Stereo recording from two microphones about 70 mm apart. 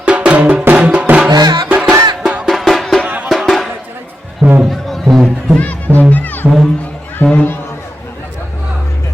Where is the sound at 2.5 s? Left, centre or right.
Centre.